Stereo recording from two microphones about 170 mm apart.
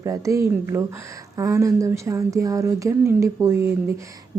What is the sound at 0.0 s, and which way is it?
A woman's voice, 20° right (ahead or behind).